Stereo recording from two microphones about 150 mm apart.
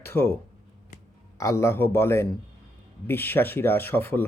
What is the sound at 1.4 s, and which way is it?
Speech, 20° left (ahead or behind).